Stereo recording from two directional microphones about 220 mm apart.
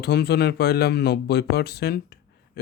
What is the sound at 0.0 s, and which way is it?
Speech, 45° left (ahead or behind).